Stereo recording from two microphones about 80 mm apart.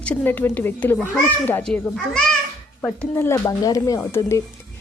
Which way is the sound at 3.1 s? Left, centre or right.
Left.